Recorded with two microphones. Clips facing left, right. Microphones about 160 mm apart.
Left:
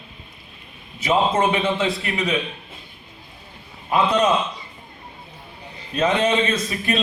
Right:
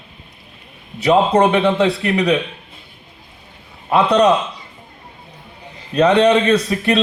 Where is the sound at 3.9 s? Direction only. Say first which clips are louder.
Right 5 dB; 70° right (ahead or behind).